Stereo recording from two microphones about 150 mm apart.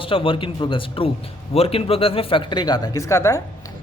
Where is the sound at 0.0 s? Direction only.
35° left (ahead or behind); by 3.4 s 20° left (ahead or behind).